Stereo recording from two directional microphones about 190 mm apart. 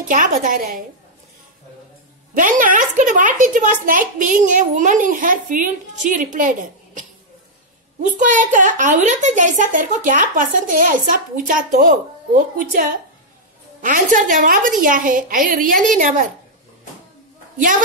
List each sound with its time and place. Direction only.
0.1 s a child's voice: 45° right (ahead or behind)
2.3 s a child's voice: 45° right (ahead or behind)
8.2 s a child's voice: 45° right (ahead or behind)
17.6 s a child's voice: 45° right (ahead or behind)